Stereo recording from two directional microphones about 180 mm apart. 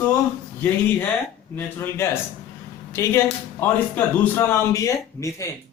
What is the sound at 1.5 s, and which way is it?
A man's voice, 10° left (ahead or behind).